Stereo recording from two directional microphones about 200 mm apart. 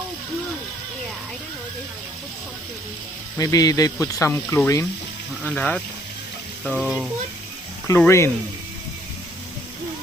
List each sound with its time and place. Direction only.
3.3 s speech: 20° left (ahead or behind); by 7.1 s centre (ahead or behind)
7.9 s speech: 10° left (ahead or behind)